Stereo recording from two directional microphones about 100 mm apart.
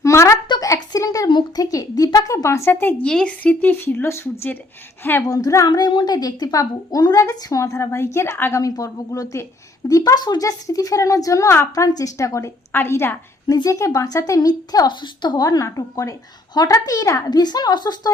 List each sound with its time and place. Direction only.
0.0 s a sound: 30° left (ahead or behind)
2.1 s a woman's voice: 30° left (ahead or behind)
3.0 s speech: 10° left (ahead or behind)
5.2 s a woman's voice: 35° left (ahead or behind)
8.6 s a woman's voice: 35° left (ahead or behind)
11.7 s a woman's voice: 35° left (ahead or behind)
13.5 s a woman's voice: 35° left (ahead or behind)
17.2 s speech: 45° left (ahead or behind)